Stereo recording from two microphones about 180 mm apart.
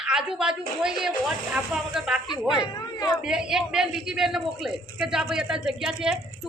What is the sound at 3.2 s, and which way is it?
A woman's voice, 5° right (ahead or behind).